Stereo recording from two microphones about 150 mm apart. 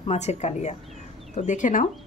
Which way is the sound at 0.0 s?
45° left (ahead or behind).